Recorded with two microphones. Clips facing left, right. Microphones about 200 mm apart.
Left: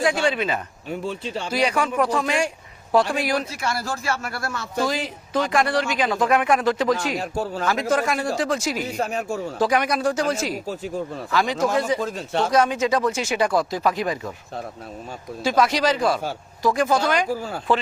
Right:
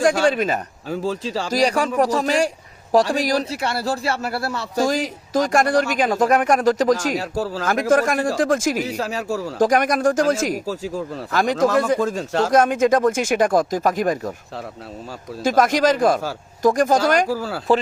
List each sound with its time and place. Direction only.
0.0 s speech: 45° right (ahead or behind)
0.9 s speech: 90° right
1.5 s a man's voice: 40° right (ahead or behind)
15.4 s speech: 50° right (ahead or behind)